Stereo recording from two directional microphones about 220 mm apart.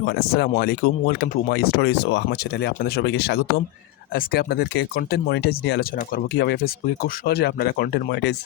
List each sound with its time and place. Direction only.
0.0 s speech: 45° left (ahead or behind)